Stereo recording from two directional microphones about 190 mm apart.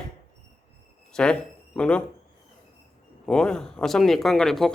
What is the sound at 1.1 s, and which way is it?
Speech, 5° left (ahead or behind).